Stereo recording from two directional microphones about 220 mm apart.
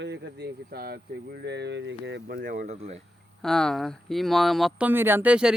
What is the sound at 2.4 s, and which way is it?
Speech, 35° right (ahead or behind).